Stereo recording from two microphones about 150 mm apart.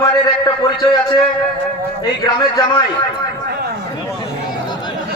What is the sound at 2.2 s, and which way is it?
Speech, 25° left (ahead or behind).